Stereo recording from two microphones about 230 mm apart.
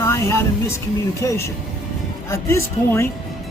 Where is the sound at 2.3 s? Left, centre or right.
Centre.